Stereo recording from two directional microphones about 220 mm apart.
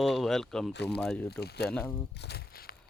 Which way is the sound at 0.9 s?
5° left (ahead or behind).